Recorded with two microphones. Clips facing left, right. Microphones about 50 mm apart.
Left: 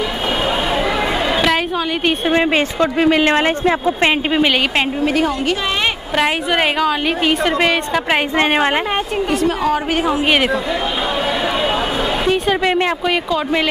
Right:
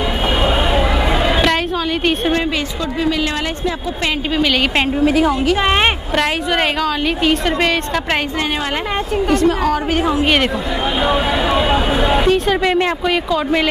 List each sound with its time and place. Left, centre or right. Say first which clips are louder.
0.7 s chatter: right 1 dB; centre
2.5 s a woman's voice: left 5 dB; left
4.7 s a woman's voice: right 2 dB; centre
9.3 s a woman's voice: right 2 dB; centre
11.7 s a sound: right 3 dB; centre
12.3 s a woman's voice: right 1 dB; centre